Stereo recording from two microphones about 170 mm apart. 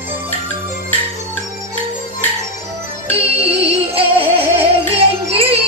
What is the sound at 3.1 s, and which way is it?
Music, 35° right (ahead or behind).